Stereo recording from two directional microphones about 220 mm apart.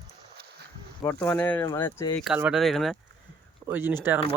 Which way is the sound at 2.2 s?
5° right (ahead or behind).